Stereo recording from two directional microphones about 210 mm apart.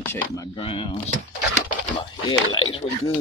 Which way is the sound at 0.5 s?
25° left (ahead or behind).